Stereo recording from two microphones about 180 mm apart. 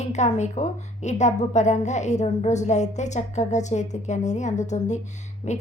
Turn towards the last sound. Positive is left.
turn(degrees=40)  # may be behind; listen again after turning